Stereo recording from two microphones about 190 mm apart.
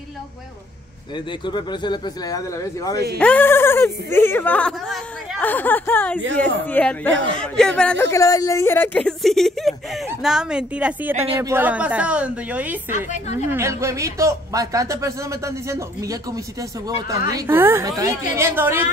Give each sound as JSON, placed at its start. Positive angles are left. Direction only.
{"t": 1.1, "sound": "speech", "side_deg": 25}
{"t": 3.2, "sound": "speech", "side_deg": 10}